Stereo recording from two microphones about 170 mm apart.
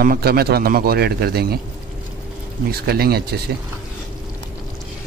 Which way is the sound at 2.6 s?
65° right (ahead or behind).